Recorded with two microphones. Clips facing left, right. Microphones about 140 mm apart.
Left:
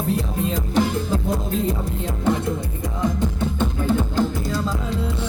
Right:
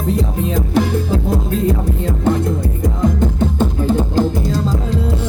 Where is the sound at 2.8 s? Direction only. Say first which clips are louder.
Right 6 dB; 45° right (ahead or behind).